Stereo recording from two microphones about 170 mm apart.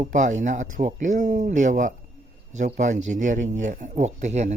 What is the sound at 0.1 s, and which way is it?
Speech, 45° right (ahead or behind).